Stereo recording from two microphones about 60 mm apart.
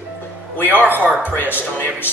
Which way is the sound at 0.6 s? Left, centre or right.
Left.